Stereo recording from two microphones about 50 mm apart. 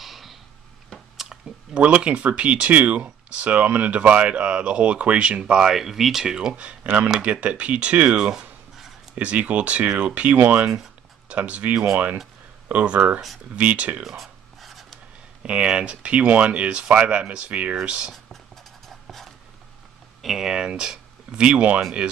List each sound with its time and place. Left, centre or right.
0.0 s a sound: centre
1.7 s speech: right; by 6.3 s centre
6.5 s speech: right
8.3 s a sound: centre
9.1 s speech: right
14.0 s writing: centre
15.4 s speech: right
18.9 s a sound: centre
20.2 s speech: centre; by 21.8 s right